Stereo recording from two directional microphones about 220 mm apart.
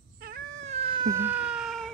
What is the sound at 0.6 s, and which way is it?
Cat, 25° right (ahead or behind).